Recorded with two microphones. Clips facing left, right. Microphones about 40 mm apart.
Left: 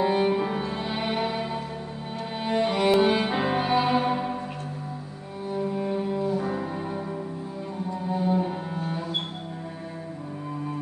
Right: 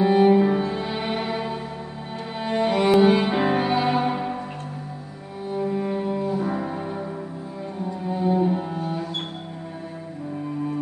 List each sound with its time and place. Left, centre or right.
0.0 s cello: centre
5.5 s cello: centre
6.3 s music: centre
8.1 s cello: centre